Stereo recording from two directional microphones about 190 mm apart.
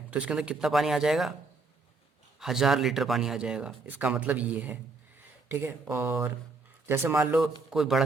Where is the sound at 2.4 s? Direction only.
Centre (ahead or behind).